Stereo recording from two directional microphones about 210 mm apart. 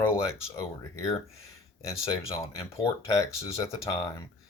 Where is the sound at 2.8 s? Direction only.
15° left (ahead or behind).